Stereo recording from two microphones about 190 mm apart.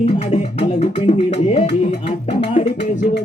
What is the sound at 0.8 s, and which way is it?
Music, 35° left (ahead or behind).